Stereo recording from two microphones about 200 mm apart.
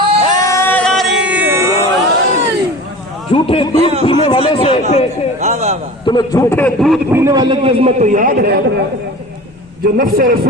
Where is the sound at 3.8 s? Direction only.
30° right (ahead or behind).